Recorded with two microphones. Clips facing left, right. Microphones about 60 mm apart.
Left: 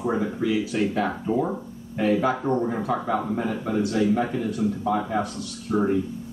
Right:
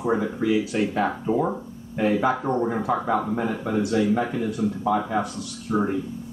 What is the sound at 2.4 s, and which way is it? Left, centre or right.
Speech, centre.